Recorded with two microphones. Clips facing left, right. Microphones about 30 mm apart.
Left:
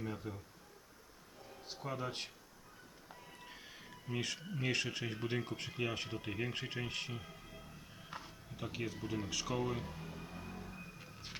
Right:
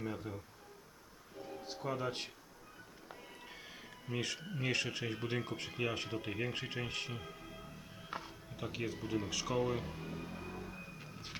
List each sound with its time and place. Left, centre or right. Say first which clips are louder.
0.0 s speech: right 2 dB; centre
1.6 s speech: right 3 dB; centre
3.1 s music: right 2 dB; centre
4.0 s speech: right 1 dB; centre
8.1 s a sound: right 4 dB; centre
10.9 s a sound: right 2 dB; centre